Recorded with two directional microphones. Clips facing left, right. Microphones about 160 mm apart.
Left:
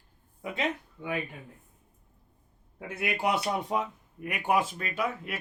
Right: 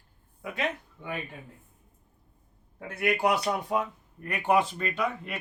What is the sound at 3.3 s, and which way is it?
A man's voice, 25° left (ahead or behind).